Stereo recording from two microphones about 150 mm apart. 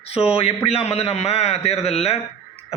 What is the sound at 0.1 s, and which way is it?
A man's voice, 40° left (ahead or behind).